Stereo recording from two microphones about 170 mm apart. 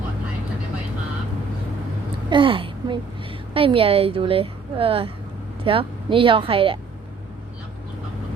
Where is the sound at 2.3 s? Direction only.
30° right (ahead or behind).